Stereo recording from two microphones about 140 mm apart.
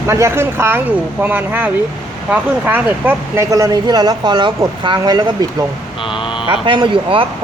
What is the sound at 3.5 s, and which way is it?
Speech, 25° right (ahead or behind).